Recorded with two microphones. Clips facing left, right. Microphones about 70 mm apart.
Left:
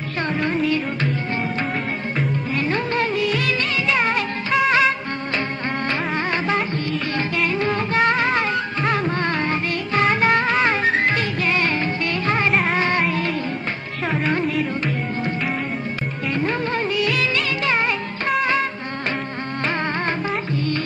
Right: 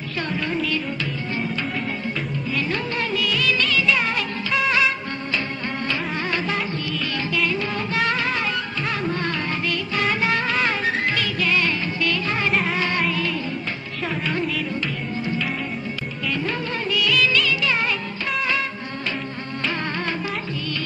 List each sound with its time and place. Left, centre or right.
0.5 s music: left
2.1 s music of bollywood: left
5.9 s music: left
7.2 s music of bollywood: left
10.3 s music: left
16.3 s music of bollywood: left
19.6 s music: left